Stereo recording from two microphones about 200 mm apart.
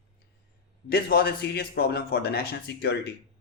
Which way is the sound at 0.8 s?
50° left (ahead or behind).